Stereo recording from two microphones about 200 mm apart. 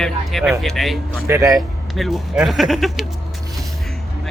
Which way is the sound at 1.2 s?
15° right (ahead or behind).